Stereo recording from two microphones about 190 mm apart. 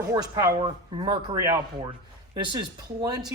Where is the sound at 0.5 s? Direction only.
30° right (ahead or behind).